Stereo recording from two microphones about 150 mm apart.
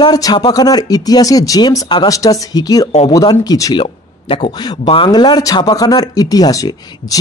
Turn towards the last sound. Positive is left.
turn(degrees=25)  # may be behind; listen again after turning